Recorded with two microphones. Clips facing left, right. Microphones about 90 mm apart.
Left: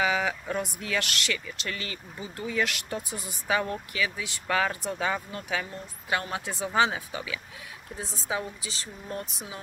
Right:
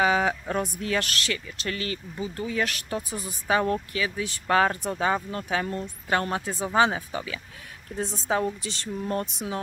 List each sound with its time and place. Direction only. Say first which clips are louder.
0.0 s speech: right 4 dB; 35° right (ahead or behind)
5.7 s speech: right 4 dB; 45° right (ahead or behind)
8.3 s speech: right 6 dB; 55° right (ahead or behind)